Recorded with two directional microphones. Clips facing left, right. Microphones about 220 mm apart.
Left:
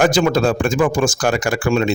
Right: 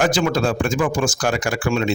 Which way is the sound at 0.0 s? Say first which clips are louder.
Left 4 dB; 45° left (ahead or behind).